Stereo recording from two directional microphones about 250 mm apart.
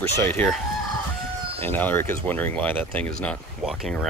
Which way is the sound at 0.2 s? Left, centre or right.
Centre.